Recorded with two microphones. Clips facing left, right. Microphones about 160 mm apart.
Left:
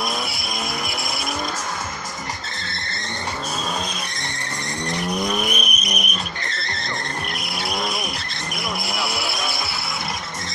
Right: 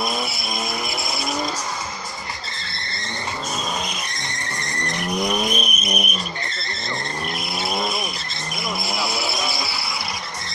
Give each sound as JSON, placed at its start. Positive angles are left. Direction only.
{"t": 5.2, "sound": "vehicle", "side_deg": -15}
{"t": 5.5, "sound": "vehicle", "side_deg": -35}
{"t": 8.8, "sound": "vehicle", "side_deg": 10}